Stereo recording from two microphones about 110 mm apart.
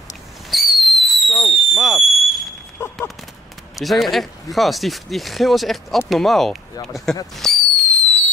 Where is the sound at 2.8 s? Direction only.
20° left (ahead or behind).